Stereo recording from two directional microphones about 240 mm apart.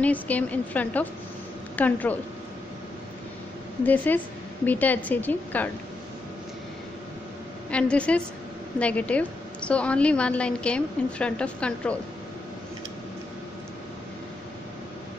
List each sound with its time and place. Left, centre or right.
0.0 s a woman's voice: centre
3.8 s a woman's voice: centre
7.7 s a woman's voice: centre